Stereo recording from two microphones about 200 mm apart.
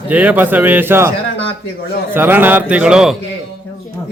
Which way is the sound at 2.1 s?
10° right (ahead or behind).